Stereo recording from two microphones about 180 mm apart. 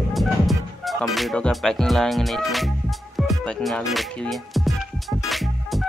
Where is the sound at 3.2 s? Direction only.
Centre (ahead or behind).